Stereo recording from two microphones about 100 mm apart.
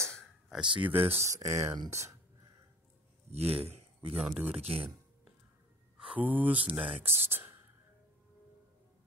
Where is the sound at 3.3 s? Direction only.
85° right.